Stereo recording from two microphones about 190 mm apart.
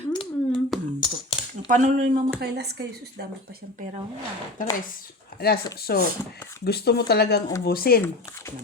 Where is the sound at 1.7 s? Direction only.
45° right (ahead or behind).